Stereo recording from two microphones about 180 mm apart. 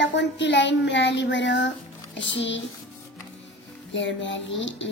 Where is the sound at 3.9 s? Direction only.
90° left.